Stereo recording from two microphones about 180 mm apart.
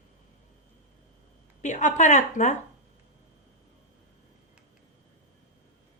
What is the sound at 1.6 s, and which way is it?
Speech, 40° left (ahead or behind).